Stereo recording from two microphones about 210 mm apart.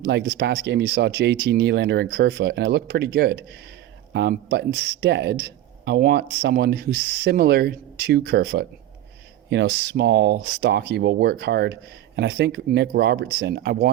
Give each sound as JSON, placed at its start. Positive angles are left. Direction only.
{"t": 0.0, "sound": "speech", "side_deg": -50}